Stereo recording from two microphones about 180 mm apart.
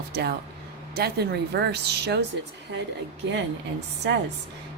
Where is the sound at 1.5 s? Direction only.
65° right (ahead or behind).